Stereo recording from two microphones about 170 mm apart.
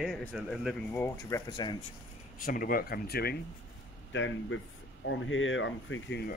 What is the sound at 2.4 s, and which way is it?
Speech, 55° left (ahead or behind).